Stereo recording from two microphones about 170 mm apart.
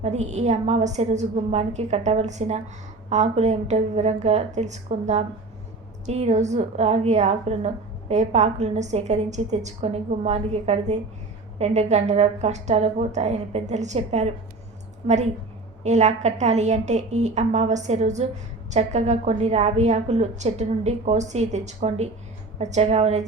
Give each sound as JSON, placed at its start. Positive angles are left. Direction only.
{"t": 0.0, "sound": "a woman's voice", "side_deg": -40}